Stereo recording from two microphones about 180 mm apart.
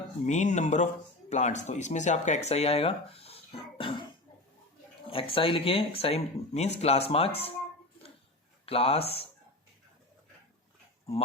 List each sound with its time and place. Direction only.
0.3 s speech: 40° left (ahead or behind)
5.0 s speech: 30° left (ahead or behind)
8.6 s speech: 35° left (ahead or behind)